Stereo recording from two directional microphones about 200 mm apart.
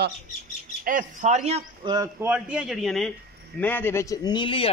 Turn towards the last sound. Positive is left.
turn(degrees=25)  # may be behind; listen again after turning